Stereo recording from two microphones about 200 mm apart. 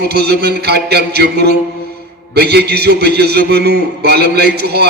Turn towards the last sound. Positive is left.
turn(degrees=-50)  # may be behind; listen again after turning